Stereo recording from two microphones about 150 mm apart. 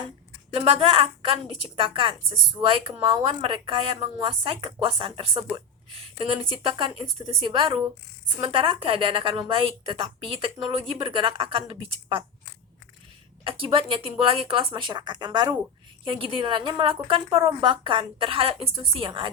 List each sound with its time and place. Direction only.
0.5 s a woman's voice: 40° right (ahead or behind)
13.4 s a woman's voice: 35° right (ahead or behind)